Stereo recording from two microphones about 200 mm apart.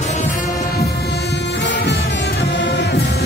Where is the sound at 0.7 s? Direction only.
55° left (ahead or behind).